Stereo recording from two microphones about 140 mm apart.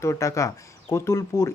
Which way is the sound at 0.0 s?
20° left (ahead or behind).